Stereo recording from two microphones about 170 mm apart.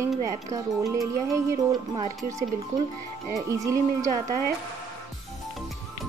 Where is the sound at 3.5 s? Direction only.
20° right (ahead or behind).